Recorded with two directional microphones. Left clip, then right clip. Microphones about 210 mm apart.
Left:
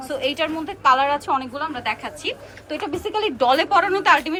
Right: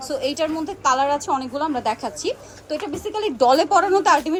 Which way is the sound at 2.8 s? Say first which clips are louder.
Left 3 dB; 5° right (ahead or behind).